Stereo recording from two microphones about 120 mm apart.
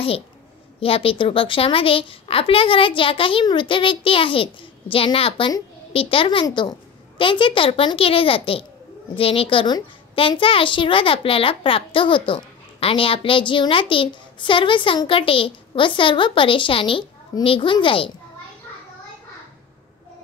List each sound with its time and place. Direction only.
0.7 s a child's voice: 50° left (ahead or behind)
6.4 s a child's voice: 35° left (ahead or behind)